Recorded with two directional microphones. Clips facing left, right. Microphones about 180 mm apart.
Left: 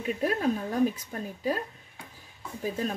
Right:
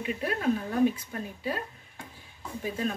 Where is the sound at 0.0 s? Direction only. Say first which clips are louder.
Left 2 dB; 40° left (ahead or behind).